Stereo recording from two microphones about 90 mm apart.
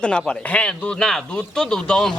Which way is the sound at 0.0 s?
10° left (ahead or behind).